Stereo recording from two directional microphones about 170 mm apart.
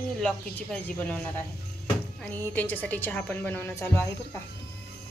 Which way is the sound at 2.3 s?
10° left (ahead or behind).